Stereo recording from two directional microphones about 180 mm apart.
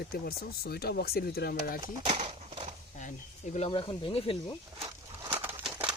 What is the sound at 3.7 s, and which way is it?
Speech, 25° left (ahead or behind).